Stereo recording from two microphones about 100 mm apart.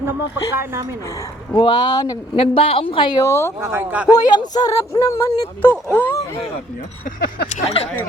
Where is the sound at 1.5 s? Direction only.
50° left (ahead or behind).